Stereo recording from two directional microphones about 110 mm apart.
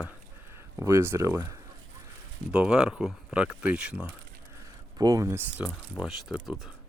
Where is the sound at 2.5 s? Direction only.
10° right (ahead or behind).